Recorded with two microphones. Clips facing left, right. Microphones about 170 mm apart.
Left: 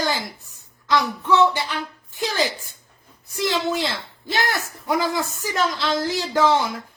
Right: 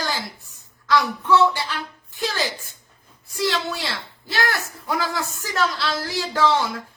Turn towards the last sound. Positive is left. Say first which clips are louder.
# left 2 dB
turn(degrees=20)  # may be behind; listen again after turning